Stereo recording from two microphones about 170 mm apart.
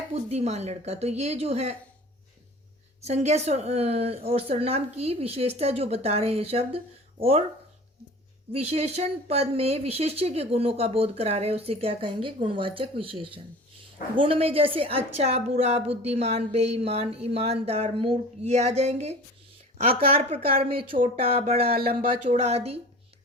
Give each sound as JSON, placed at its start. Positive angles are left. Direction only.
{"t": 0.1, "sound": "a woman's voice", "side_deg": -40}
{"t": 3.0, "sound": "a woman's voice", "side_deg": -40}
{"t": 8.5, "sound": "a woman's voice", "side_deg": -35}
{"t": 14.2, "sound": "a woman's voice", "side_deg": -35}
{"t": 20.0, "sound": "speech", "side_deg": -65}
{"t": 20.3, "sound": "a woman's voice", "side_deg": -35}
{"t": 21.6, "sound": "speech", "side_deg": -65}
{"t": 22.0, "sound": "a woman's voice", "side_deg": -40}